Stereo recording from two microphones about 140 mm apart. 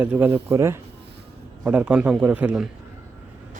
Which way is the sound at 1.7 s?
10° right (ahead or behind).